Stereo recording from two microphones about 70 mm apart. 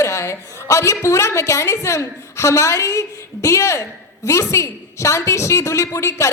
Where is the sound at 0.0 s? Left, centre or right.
Left.